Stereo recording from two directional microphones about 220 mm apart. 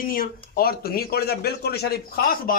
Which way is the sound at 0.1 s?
40° left (ahead or behind).